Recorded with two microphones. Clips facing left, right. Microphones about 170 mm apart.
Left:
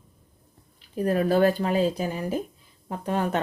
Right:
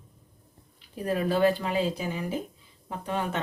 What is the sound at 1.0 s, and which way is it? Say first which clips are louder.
Speech: left 3 dB; 45° left (ahead or behind).